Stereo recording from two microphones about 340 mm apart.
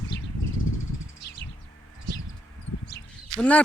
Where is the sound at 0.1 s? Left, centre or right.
Left.